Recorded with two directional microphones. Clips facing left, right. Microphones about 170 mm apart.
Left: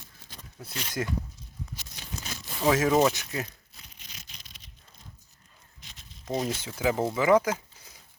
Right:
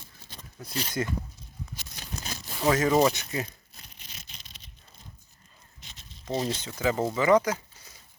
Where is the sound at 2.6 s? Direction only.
5° left (ahead or behind).